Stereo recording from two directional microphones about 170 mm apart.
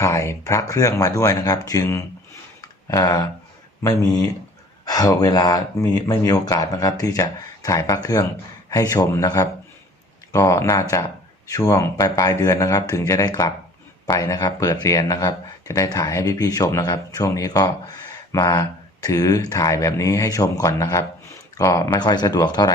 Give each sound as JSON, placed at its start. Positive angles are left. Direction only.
{"t": 0.0, "sound": "speech", "side_deg": 15}